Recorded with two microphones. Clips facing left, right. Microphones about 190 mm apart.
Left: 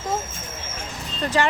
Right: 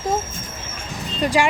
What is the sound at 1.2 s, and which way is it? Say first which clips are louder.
Speech: right 4 dB; 10° right (ahead or behind).